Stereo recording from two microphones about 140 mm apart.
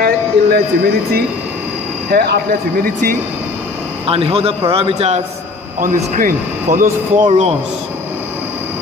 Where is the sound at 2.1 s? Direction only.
90° right.